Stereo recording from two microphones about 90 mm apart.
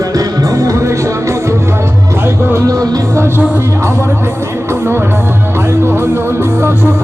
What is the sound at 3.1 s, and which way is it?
Music, 30° right (ahead or behind).